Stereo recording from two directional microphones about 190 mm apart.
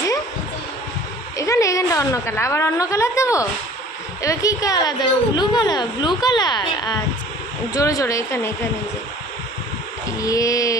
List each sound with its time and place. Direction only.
1.4 s a woman's voice: 15° left (ahead or behind)
10.2 s speech: 15° left (ahead or behind)